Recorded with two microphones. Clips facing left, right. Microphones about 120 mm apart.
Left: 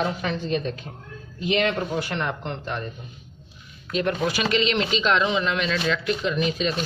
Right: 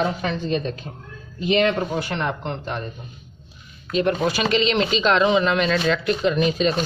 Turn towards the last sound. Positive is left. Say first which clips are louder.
# right 4 dB
turn(degrees=-40)  # may be behind; listen again after turning